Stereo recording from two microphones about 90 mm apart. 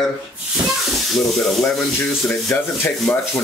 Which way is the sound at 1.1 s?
5° left (ahead or behind).